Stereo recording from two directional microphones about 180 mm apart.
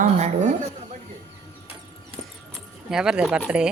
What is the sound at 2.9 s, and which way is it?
Speech, 5° right (ahead or behind).